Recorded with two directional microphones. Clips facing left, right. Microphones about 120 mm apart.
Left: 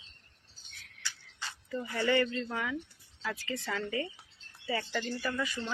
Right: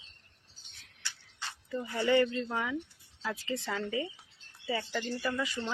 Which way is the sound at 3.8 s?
10° right (ahead or behind).